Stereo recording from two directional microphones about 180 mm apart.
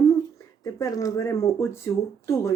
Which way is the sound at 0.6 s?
20° left (ahead or behind).